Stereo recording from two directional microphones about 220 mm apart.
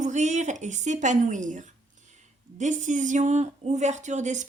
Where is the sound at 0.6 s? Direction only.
35° right (ahead or behind).